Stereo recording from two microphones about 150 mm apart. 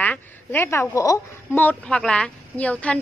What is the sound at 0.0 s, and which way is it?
A woman's voice, 10° left (ahead or behind).